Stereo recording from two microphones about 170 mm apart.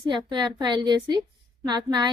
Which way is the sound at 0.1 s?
25° right (ahead or behind).